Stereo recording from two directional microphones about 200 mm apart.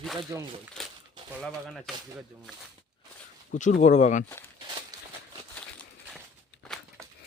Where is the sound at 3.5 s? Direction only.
40° left (ahead or behind).